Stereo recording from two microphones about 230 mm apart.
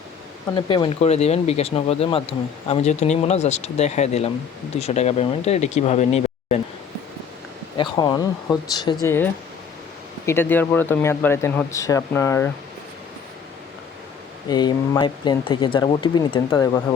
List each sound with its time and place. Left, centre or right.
0.5 s speech: left
7.8 s speech: centre
14.5 s speech: centre